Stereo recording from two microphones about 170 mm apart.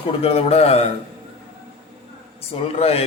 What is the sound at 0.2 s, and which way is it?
Speech, 35° left (ahead or behind).